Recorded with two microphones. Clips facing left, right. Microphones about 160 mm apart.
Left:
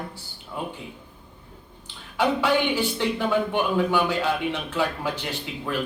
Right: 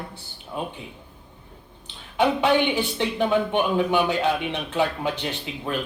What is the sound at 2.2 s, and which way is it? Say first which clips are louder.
Speech: right 2 dB; 20° right (ahead or behind).